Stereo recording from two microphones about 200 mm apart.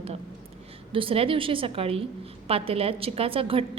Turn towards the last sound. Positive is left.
turn(degrees=-25)  # may be behind; listen again after turning